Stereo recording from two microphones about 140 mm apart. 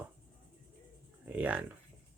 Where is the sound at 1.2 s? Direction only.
10° right (ahead or behind).